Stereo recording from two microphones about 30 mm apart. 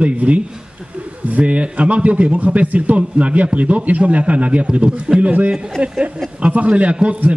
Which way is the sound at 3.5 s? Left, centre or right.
Right.